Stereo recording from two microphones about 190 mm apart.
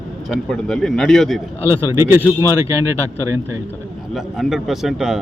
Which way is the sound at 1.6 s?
15° right (ahead or behind).